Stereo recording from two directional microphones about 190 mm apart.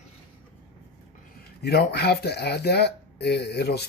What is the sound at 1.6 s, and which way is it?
Speech, 55° left (ahead or behind).